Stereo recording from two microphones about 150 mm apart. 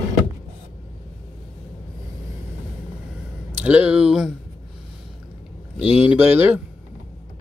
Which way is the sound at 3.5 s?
10° right (ahead or behind).